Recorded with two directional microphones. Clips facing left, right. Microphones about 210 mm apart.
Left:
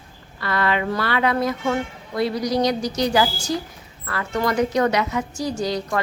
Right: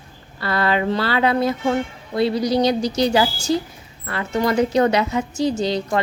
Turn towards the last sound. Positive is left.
turn(degrees=-25)  # may be behind; listen again after turning